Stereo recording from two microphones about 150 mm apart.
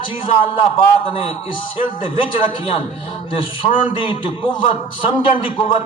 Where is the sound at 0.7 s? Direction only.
35° left (ahead or behind).